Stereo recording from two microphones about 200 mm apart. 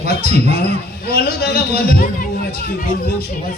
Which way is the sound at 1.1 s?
50° left (ahead or behind).